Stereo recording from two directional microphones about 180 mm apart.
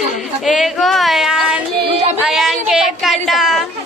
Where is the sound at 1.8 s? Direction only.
35° right (ahead or behind).